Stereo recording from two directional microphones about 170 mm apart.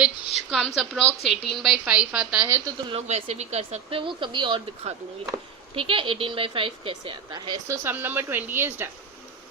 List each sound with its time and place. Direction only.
0.0 s a woman's voice: centre (ahead or behind)
3.1 s speech: 40° right (ahead or behind); by 7.8 s 25° right (ahead or behind)
7.9 s speech: 10° right (ahead or behind)